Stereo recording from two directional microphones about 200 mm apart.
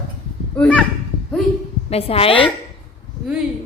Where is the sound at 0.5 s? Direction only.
5° left (ahead or behind).